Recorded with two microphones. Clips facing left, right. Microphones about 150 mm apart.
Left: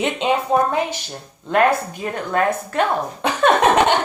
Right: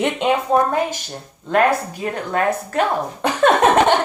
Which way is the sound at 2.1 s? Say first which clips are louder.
Left 1 dB; 40° right (ahead or behind).